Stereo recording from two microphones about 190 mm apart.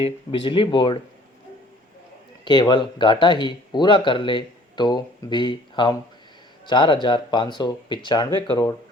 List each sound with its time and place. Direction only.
0.0 s speech: 25° left (ahead or behind)
2.4 s speech: 25° left (ahead or behind)